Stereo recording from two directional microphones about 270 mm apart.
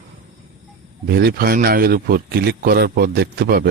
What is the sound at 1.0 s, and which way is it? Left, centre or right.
A man's voice, right.